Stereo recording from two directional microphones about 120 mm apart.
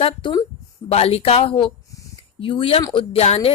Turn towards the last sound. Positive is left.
turn(degrees=55)  # may be behind; listen again after turning